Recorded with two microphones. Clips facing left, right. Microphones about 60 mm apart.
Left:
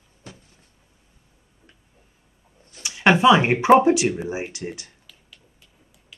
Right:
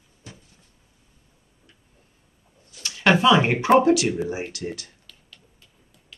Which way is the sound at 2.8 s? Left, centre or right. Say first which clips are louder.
Left 3 dB; centre.